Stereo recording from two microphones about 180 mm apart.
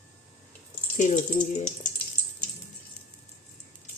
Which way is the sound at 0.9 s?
45° left (ahead or behind).